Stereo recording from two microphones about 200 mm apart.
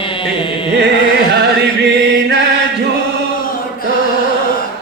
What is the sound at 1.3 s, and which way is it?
Chant, 55° right (ahead or behind).